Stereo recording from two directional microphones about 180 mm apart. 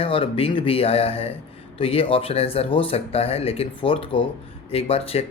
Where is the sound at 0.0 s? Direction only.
30° left (ahead or behind).